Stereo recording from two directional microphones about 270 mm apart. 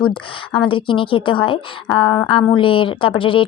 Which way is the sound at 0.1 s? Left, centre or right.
Centre.